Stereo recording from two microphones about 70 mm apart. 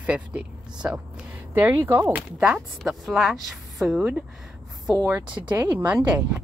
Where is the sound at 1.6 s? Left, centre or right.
Right.